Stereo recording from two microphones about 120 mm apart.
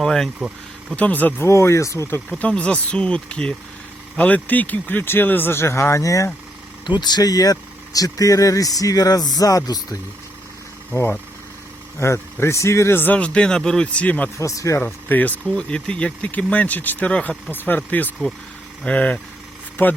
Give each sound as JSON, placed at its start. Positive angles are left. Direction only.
{"t": 0.0, "sound": "speech", "side_deg": 5}
{"t": 0.3, "sound": "speech", "side_deg": -10}
{"t": 0.9, "sound": "speech", "side_deg": 15}
{"t": 2.4, "sound": "speech", "side_deg": 10}
{"t": 6.8, "sound": "speech", "side_deg": 40}
{"t": 10.9, "sound": "speech", "side_deg": 15}
{"t": 14.3, "sound": "speech", "side_deg": 25}
{"t": 14.8, "sound": "speech", "side_deg": 15}